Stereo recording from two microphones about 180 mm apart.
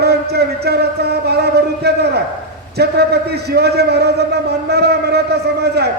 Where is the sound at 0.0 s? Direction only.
65° right (ahead or behind).